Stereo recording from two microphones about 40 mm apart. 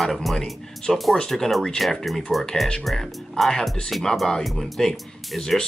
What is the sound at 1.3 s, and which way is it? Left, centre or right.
Speech, centre.